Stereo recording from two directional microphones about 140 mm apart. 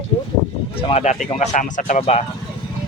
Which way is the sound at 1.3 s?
60° left (ahead or behind).